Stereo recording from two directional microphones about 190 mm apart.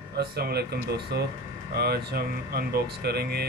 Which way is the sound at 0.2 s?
55° right (ahead or behind).